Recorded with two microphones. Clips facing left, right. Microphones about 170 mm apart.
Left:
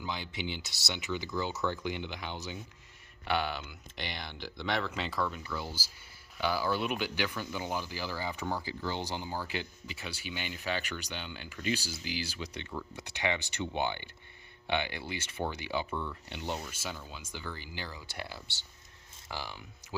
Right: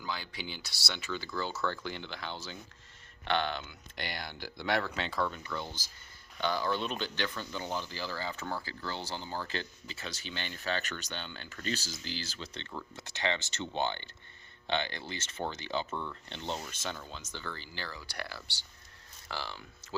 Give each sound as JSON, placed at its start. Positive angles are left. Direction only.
{"t": 0.0, "sound": "speech", "side_deg": 20}
{"t": 15.9, "sound": "speech", "side_deg": -15}
{"t": 16.3, "sound": "speech", "side_deg": 10}